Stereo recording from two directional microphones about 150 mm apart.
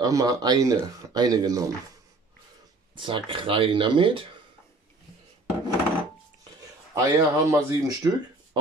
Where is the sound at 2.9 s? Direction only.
35° right (ahead or behind).